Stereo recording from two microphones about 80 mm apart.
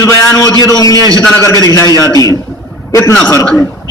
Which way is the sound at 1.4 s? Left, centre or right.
Left.